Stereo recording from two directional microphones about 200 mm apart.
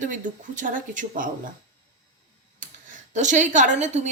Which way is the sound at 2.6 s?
40° right (ahead or behind).